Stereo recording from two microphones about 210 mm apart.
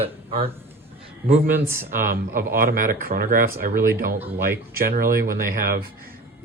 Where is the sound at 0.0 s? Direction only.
25° right (ahead or behind).